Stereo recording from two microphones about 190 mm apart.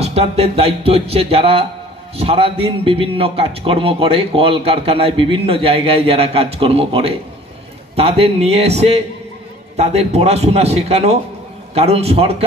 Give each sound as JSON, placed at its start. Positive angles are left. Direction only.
{"t": 0.0, "sound": "music", "side_deg": -30}
{"t": 2.1, "sound": "a man's voice", "side_deg": -30}
{"t": 7.9, "sound": "music", "side_deg": -30}